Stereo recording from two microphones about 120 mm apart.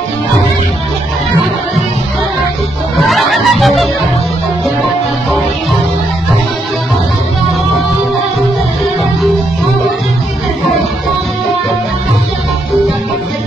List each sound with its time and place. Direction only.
3.0 s music: centre (ahead or behind)